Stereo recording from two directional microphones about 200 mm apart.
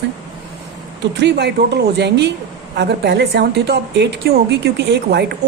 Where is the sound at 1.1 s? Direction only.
60° right (ahead or behind).